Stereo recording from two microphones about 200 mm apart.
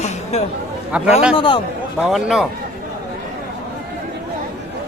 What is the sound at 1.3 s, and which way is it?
Speech, 25° left (ahead or behind).